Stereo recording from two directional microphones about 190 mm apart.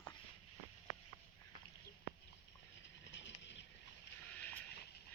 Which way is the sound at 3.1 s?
70° left (ahead or behind).